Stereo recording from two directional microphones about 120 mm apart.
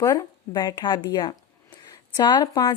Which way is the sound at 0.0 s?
30° left (ahead or behind).